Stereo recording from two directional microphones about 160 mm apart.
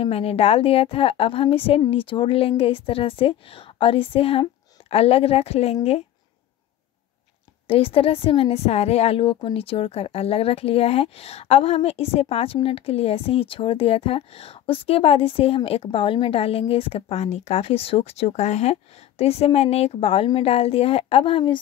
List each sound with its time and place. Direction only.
0.0 s speech: 40° left (ahead or behind)
7.6 s speech: 35° left (ahead or behind)